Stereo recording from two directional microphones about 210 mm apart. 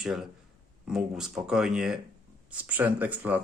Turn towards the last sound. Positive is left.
turn(degrees=-10)  # may be behind; listen again after turning